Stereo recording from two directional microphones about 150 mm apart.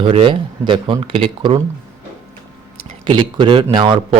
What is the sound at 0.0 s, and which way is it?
Speech, 35° right (ahead or behind).